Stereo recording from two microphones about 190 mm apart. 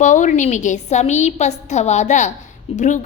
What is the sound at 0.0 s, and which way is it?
A woman's voice, 40° left (ahead or behind).